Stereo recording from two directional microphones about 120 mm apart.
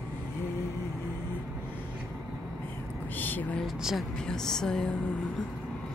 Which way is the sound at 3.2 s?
15° left (ahead or behind).